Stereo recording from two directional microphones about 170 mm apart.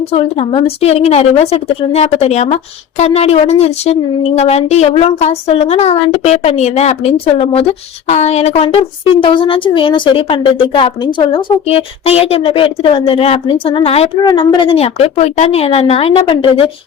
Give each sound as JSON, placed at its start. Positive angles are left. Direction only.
{"t": 0.1, "sound": "speech", "side_deg": 35}
{"t": 14.3, "sound": "speech", "side_deg": 25}